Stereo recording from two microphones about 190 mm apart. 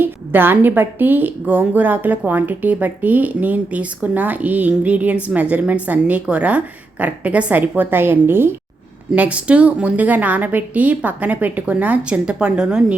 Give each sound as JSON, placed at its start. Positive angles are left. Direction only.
{"t": 0.0, "sound": "a woman's voice", "side_deg": -10}